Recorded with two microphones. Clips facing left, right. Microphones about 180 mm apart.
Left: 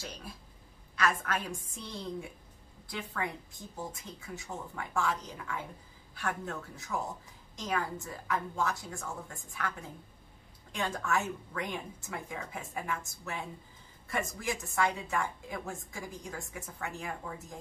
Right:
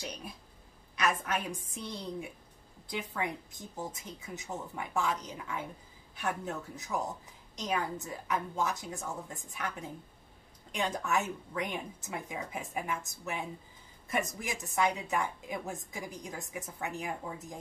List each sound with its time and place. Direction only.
0.0 s a woman's voice: 15° right (ahead or behind)